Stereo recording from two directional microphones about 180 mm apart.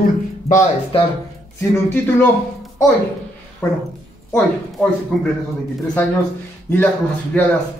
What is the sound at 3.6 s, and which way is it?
Speech, 15° left (ahead or behind).